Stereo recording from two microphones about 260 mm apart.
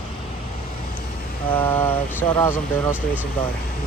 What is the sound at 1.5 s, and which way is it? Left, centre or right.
Speech, centre.